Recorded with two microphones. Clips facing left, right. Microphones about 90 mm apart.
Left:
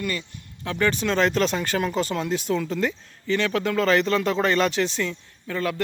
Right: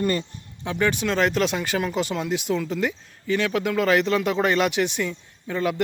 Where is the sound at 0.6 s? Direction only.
5° right (ahead or behind).